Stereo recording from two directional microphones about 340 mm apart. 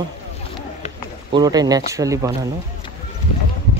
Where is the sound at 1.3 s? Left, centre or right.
Centre.